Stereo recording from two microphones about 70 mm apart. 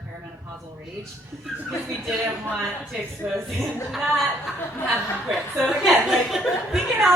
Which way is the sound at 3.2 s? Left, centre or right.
Right.